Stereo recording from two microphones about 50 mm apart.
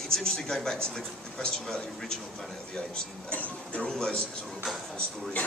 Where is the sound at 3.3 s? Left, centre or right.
Left.